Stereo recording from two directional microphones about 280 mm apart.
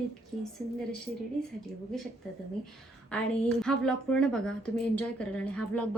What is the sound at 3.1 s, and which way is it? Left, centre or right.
A woman's voice, centre.